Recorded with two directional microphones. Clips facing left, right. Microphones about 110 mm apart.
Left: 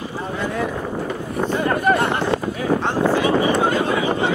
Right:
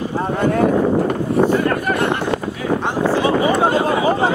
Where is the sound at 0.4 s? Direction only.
50° right (ahead or behind).